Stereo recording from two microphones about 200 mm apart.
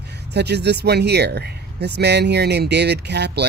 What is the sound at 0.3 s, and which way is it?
Speech, 55° right (ahead or behind).